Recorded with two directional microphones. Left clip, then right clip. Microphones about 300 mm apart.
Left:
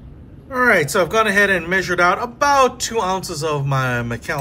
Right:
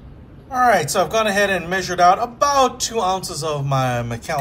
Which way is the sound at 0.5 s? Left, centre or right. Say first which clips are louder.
Left 1 dB; centre.